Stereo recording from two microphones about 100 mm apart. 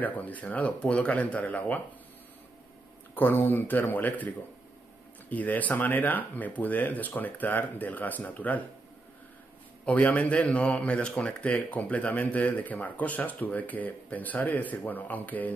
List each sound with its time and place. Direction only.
0.0 s speech: 15° left (ahead or behind)
3.2 s speech: 20° left (ahead or behind)
5.3 s speech: 15° left (ahead or behind)
9.8 s speech: 15° left (ahead or behind)